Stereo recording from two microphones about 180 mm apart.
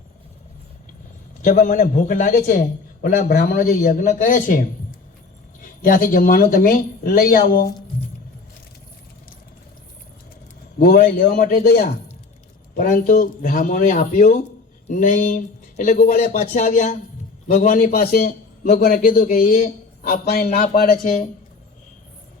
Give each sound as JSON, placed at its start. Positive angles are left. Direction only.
{"t": 1.5, "sound": "a man's voice", "side_deg": 45}
{"t": 10.8, "sound": "a man's voice", "side_deg": 55}
{"t": 12.7, "sound": "a man's voice", "side_deg": 50}